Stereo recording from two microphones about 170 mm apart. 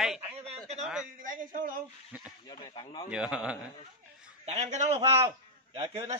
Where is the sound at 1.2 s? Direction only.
50° right (ahead or behind).